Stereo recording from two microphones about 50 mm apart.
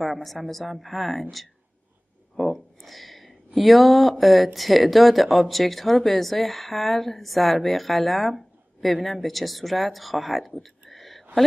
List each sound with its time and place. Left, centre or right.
0.0 s speech: centre
2.3 s a sound: centre
4.6 s a woman's voice: centre